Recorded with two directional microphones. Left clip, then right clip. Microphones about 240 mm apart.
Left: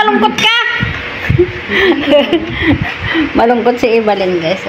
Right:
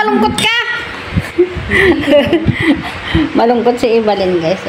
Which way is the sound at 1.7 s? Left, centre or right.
Centre.